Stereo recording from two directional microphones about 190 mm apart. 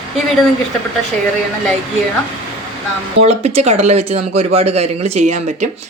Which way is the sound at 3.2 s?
35° right (ahead or behind).